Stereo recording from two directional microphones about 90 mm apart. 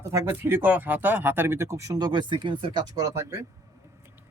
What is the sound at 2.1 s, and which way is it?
Speech, 60° right (ahead or behind).